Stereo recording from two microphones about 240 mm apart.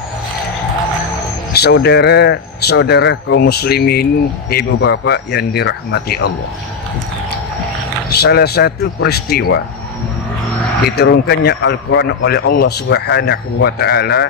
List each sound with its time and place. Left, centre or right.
1.5 s speech: left
8.1 s a man's voice: left
11.0 s a man's voice: left